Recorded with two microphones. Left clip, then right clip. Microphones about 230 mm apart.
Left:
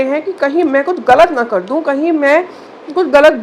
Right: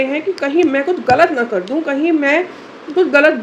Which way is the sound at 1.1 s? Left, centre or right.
Centre.